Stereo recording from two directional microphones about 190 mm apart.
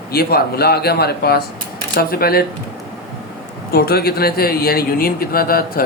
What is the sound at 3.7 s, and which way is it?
A man's voice, 55° left (ahead or behind).